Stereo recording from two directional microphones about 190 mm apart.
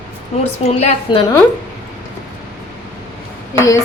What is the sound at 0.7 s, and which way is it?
Speech, 35° left (ahead or behind).